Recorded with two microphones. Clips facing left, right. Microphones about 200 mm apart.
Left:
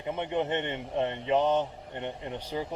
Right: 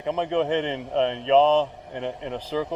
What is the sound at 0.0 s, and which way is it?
Speech, 90° right.